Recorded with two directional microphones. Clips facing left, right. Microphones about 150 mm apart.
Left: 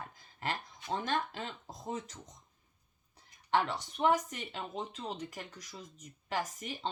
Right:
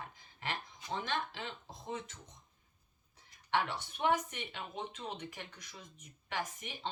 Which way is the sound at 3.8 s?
40° left (ahead or behind).